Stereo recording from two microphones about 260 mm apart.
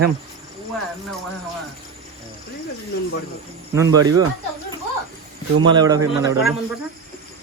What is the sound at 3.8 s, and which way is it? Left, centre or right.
Speech, centre.